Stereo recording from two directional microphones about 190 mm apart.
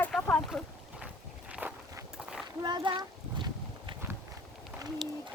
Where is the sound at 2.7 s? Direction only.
25° right (ahead or behind).